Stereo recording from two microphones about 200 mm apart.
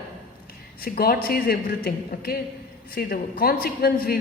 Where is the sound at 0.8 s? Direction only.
50° left (ahead or behind).